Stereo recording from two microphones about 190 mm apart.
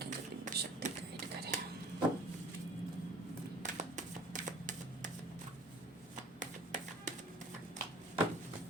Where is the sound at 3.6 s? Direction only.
40° right (ahead or behind).